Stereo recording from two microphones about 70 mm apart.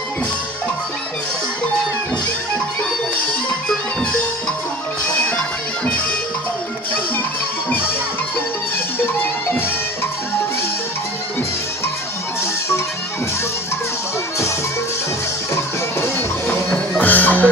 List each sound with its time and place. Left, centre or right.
5.0 s music: centre
15.5 s music: left
17.0 s music: left